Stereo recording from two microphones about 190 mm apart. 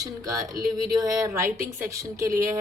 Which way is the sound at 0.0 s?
20° right (ahead or behind).